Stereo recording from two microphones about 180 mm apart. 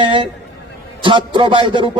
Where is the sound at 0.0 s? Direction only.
30° right (ahead or behind).